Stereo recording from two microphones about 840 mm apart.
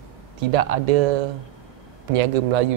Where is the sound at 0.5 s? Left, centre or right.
Right.